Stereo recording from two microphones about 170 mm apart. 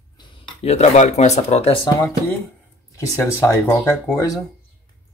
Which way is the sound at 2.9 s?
15° left (ahead or behind).